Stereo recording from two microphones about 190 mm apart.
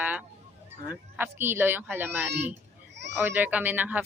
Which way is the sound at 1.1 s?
10° right (ahead or behind).